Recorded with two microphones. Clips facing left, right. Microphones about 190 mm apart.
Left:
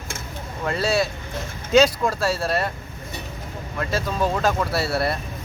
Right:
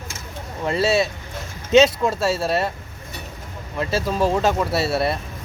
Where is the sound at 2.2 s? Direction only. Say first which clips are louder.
Right 2 dB; 25° right (ahead or behind).